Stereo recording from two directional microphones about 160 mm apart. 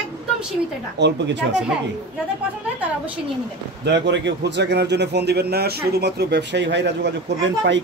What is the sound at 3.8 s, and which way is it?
A man's voice, 90° right.